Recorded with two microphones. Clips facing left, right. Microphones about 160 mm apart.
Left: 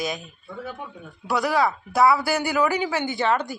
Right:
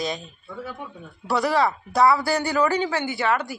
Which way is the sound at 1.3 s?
Centre (ahead or behind).